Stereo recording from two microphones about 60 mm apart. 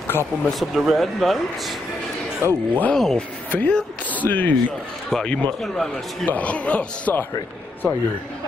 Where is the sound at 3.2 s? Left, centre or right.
Left.